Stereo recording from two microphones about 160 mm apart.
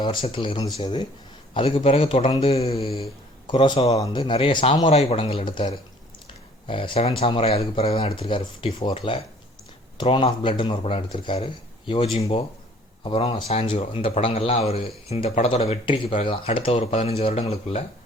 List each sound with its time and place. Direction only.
0.0 s a man's voice: 30° left (ahead or behind)
6.7 s a man's voice: 35° left (ahead or behind)